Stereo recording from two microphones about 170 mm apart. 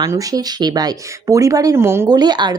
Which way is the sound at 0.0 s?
20° right (ahead or behind).